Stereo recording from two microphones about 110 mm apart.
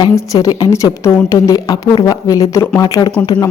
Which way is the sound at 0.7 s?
30° left (ahead or behind).